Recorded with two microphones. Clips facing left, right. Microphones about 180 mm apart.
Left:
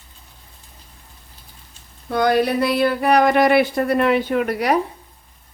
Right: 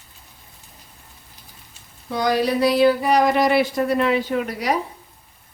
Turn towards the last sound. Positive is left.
turn(degrees=60)  # may be behind; listen again after turning